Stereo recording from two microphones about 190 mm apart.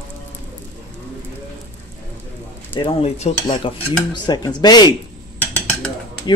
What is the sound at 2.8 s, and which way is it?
Cutlery, 30° left (ahead or behind).